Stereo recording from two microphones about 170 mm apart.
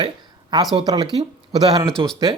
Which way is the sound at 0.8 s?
25° right (ahead or behind).